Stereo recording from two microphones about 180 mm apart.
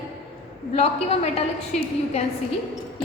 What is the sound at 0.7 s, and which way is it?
Speech, 35° left (ahead or behind).